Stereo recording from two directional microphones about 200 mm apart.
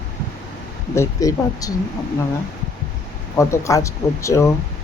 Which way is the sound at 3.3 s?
15° left (ahead or behind).